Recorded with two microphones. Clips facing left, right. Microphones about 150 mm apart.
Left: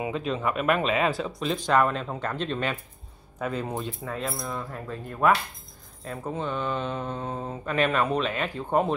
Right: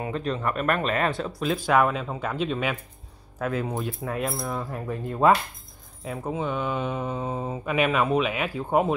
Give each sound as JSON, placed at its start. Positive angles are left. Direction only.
{"t": 0.1, "sound": "speech", "side_deg": 5}
{"t": 6.0, "sound": "speech", "side_deg": -10}